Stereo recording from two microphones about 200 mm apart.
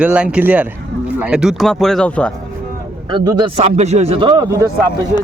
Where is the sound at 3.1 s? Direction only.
20° right (ahead or behind).